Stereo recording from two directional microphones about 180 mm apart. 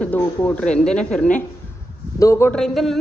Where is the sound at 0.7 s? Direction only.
40° left (ahead or behind).